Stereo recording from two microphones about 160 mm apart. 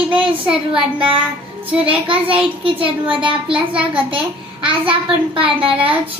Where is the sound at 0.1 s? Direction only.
30° right (ahead or behind).